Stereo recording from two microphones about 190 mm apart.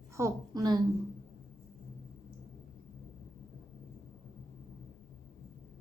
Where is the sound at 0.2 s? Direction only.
20° right (ahead or behind).